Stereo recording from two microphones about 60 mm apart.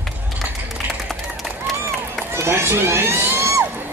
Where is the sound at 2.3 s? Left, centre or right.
Right.